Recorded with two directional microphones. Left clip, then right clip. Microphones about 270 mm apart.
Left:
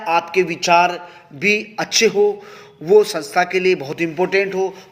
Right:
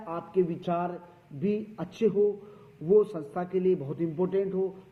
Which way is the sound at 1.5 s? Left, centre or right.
Left.